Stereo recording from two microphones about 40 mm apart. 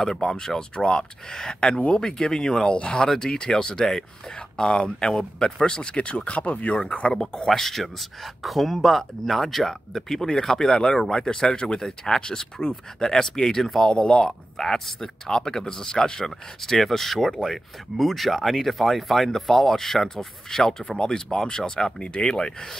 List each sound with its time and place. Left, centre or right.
0.4 s a man's voice: centre
1.7 s speech: left
7.2 s a man's voice: centre
13.9 s speech: centre
14.6 s a man's voice: centre
16.8 s a man's voice: centre